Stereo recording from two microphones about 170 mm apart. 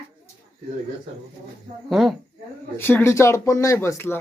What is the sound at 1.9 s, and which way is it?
Speech, centre (ahead or behind).